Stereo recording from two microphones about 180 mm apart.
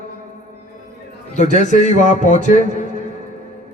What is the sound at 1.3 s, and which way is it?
A man's voice, 40° left (ahead or behind).